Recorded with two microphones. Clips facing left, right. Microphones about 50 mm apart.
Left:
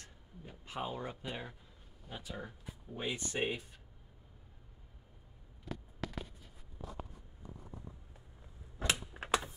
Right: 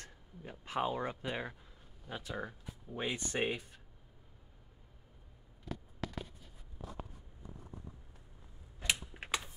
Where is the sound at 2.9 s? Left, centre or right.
Centre.